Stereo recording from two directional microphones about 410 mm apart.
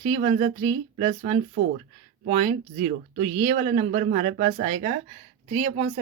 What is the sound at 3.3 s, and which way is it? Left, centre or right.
Speech, centre.